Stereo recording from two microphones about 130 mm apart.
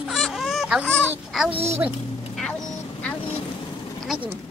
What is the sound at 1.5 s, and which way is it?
Speech, 55° right (ahead or behind).